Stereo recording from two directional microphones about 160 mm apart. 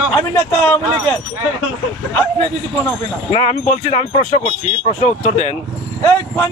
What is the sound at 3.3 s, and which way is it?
Speech, 40° left (ahead or behind).